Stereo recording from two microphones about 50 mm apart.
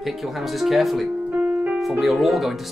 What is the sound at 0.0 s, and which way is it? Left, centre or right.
Speech, centre.